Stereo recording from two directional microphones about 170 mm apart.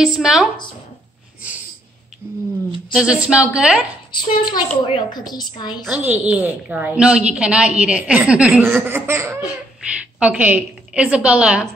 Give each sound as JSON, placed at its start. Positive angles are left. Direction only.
{"t": 0.0, "sound": "a woman's voice", "side_deg": -5}
{"t": 2.9, "sound": "a woman's voice", "side_deg": -5}
{"t": 4.1, "sound": "a woman's voice", "side_deg": 25}
{"t": 5.9, "sound": "a woman's voice", "side_deg": -10}